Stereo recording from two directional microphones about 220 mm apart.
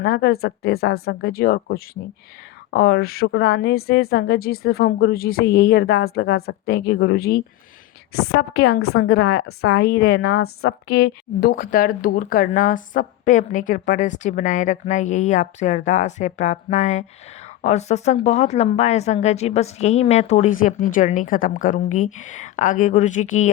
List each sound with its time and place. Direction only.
0.0 s a woman's voice: 45° left (ahead or behind); by 10.8 s 65° left (ahead or behind)
10.8 s speech: 45° left (ahead or behind)